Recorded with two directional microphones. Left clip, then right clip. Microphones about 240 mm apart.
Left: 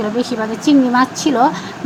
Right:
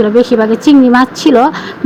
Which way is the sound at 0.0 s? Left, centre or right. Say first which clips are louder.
Right 11 dB; centre.